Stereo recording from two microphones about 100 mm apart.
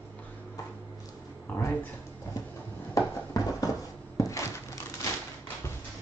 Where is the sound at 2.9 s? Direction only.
35° left (ahead or behind).